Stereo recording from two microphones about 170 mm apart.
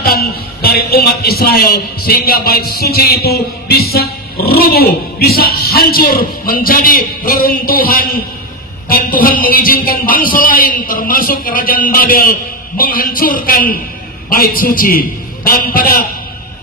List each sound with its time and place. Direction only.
0.0 s speech: 60° left (ahead or behind)